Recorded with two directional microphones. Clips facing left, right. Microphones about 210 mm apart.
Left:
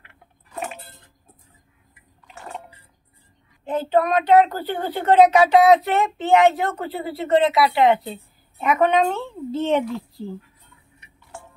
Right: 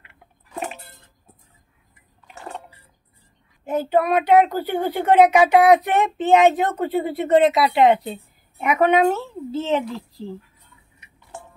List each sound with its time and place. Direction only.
3.6 s speech: 10° right (ahead or behind)